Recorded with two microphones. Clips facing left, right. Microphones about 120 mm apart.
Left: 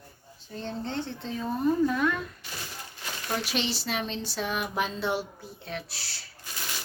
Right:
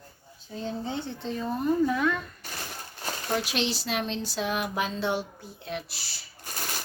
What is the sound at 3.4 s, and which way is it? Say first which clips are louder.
Speech: right 1 dB; centre (ahead or behind).